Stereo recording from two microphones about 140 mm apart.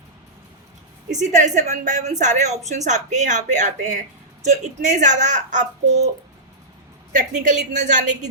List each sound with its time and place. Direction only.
1.1 s speech: 60° right (ahead or behind)
7.1 s speech: 65° right (ahead or behind)